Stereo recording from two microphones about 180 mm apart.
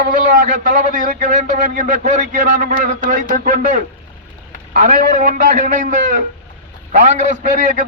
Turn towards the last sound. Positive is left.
turn(degrees=-45)  # may be behind; listen again after turning